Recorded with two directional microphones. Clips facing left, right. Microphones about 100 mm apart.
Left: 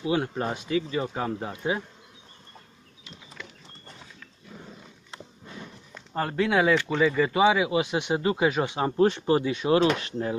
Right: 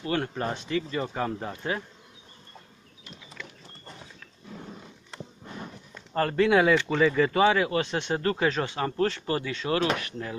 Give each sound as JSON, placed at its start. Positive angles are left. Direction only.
{"t": 0.0, "sound": "speech", "side_deg": 10}
{"t": 6.1, "sound": "speech", "side_deg": 5}